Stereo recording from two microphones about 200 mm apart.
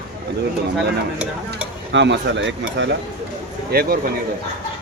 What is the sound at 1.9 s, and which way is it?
Speech, 65° right (ahead or behind).